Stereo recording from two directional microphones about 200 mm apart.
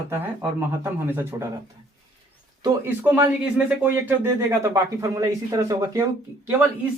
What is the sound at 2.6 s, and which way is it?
Speech, 20° right (ahead or behind).